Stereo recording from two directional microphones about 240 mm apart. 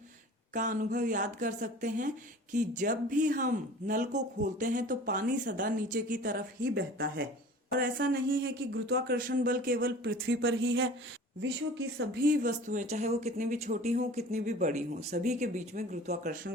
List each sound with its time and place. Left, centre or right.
0.5 s speech: right